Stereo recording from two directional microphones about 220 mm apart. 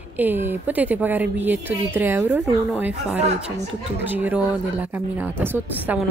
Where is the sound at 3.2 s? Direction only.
30° right (ahead or behind).